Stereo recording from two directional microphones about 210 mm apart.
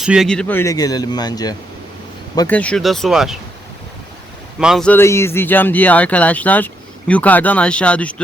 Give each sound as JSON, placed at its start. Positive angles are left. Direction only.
{"t": 0.0, "sound": "speech", "side_deg": 0}
{"t": 2.5, "sound": "speech", "side_deg": 5}
{"t": 4.6, "sound": "speech", "side_deg": 0}